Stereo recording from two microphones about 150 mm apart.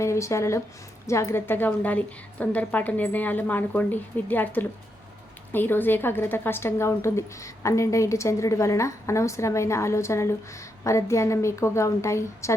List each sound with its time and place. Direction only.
0.0 s a woman's voice: 20° left (ahead or behind)